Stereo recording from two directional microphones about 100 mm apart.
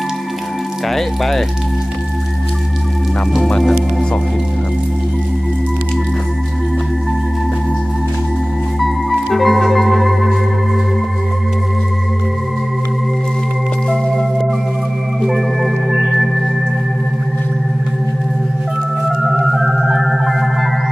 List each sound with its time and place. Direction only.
0.9 s speech: centre (ahead or behind)
3.3 s speech: centre (ahead or behind)
8.8 s music: centre (ahead or behind)
13.8 s music: 5° left (ahead or behind)
15.3 s organ: 5° right (ahead or behind)
19.5 s organ: centre (ahead or behind)